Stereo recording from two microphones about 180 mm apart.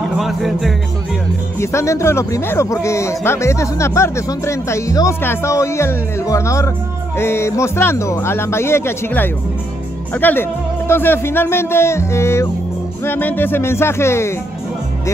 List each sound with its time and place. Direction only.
0.2 s music: centre (ahead or behind)
1.6 s speech: 15° left (ahead or behind)